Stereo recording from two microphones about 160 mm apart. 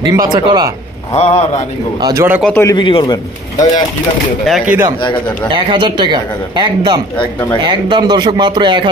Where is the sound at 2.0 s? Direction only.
25° right (ahead or behind).